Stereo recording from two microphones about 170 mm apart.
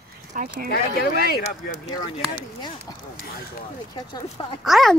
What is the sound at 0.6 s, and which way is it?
Speech, 65° left (ahead or behind).